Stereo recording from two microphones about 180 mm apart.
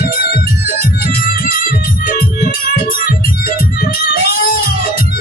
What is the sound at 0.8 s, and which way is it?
Music, 55° left (ahead or behind).